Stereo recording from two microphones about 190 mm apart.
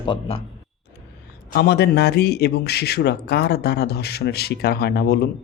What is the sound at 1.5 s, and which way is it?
A man's voice, 55° left (ahead or behind).